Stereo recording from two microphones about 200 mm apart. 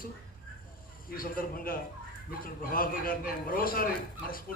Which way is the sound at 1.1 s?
45° left (ahead or behind).